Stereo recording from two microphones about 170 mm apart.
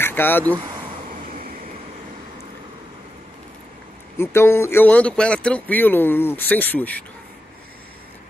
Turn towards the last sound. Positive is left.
turn(degrees=10)  # may be behind; listen again after turning